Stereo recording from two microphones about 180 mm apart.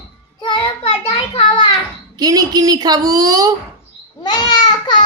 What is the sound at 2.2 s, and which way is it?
A woman's voice, 20° right (ahead or behind).